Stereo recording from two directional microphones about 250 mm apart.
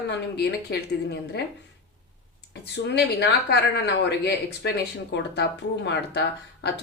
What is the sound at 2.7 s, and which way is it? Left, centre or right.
Speech, left.